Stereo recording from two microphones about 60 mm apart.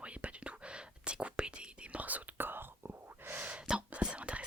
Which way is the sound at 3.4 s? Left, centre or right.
Right.